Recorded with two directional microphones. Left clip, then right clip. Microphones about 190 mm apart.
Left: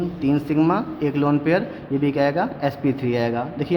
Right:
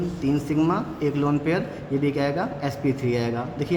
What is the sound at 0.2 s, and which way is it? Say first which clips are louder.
A man's voice: left 4 dB; 35° left (ahead or behind).